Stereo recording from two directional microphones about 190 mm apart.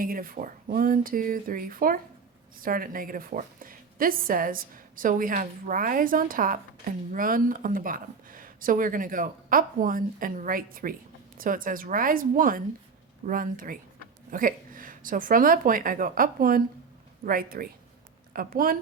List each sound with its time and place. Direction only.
0.0 s a woman's voice: 50° right (ahead or behind)